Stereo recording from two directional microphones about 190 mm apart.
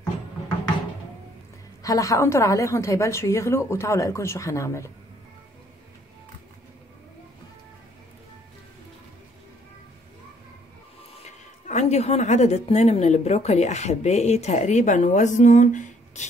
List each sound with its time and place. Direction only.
1.8 s a woman's voice: 20° left (ahead or behind)
11.2 s a woman's voice: 35° left (ahead or behind)